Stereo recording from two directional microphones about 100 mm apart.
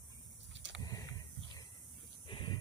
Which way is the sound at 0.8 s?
35° left (ahead or behind).